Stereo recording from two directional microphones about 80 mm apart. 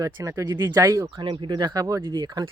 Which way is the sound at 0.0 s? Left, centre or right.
Right.